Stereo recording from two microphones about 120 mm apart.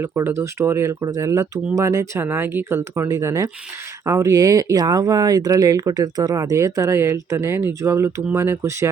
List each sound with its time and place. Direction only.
0.0 s speech: 20° right (ahead or behind)